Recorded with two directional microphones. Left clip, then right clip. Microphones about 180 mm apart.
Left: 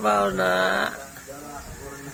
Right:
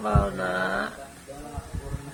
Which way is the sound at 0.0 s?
35° left (ahead or behind).